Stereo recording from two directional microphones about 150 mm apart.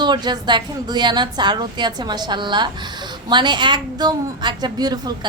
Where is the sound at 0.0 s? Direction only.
30° right (ahead or behind).